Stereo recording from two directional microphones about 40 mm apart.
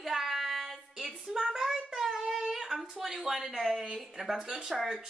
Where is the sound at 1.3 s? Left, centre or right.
Centre.